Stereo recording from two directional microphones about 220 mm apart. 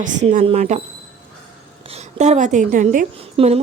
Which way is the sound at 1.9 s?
30° right (ahead or behind).